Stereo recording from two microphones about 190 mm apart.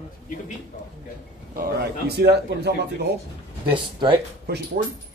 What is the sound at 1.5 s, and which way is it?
Speech, 60° right (ahead or behind).